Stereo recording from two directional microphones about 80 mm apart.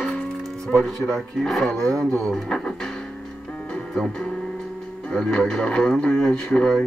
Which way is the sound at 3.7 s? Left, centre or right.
Centre.